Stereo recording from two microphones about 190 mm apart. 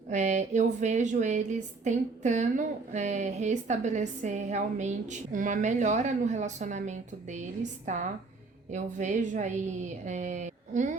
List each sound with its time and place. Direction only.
0.1 s a woman's voice: 40° right (ahead or behind)